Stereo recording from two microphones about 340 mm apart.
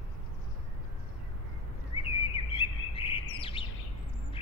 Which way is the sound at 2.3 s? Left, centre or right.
Centre.